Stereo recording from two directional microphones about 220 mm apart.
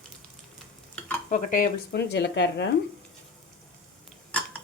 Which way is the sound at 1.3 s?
40° left (ahead or behind).